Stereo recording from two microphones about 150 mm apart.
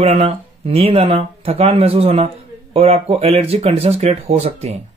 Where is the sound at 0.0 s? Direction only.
40° right (ahead or behind).